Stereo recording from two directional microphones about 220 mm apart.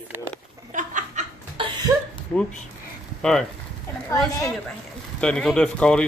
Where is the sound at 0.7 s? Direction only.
35° right (ahead or behind).